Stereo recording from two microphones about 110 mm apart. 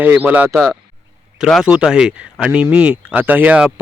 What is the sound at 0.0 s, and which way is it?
Speech, 15° right (ahead or behind).